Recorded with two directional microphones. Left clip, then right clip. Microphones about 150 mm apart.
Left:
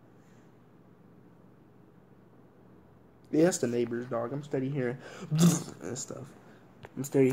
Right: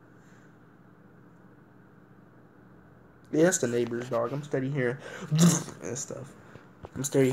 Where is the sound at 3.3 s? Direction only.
5° left (ahead or behind).